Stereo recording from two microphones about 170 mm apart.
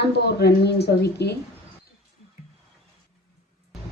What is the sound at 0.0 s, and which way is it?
A woman's voice, 75° left (ahead or behind).